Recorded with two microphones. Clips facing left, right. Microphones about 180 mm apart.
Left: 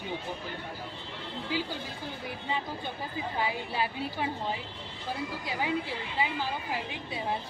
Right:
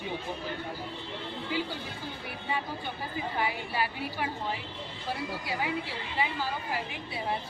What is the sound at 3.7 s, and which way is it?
Speech, 25° left (ahead or behind).